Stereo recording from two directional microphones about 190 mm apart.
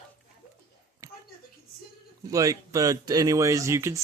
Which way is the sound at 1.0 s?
15° right (ahead or behind).